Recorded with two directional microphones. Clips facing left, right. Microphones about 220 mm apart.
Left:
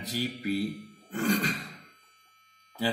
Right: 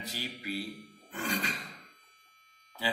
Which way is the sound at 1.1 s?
40° left (ahead or behind).